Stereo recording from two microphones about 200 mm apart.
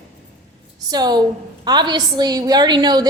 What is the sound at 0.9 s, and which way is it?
A woman's voice, 20° right (ahead or behind).